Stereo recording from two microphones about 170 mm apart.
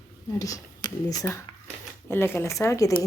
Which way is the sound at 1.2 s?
15° left (ahead or behind).